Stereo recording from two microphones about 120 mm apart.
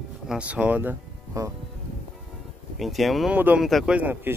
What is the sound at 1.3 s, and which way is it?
Speech, 25° right (ahead or behind).